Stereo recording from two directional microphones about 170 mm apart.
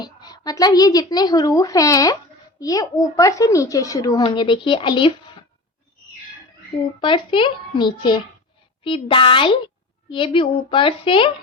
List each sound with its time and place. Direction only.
0.0 s a woman's voice: 25° left (ahead or behind)
7.0 s a woman's voice: 30° left (ahead or behind)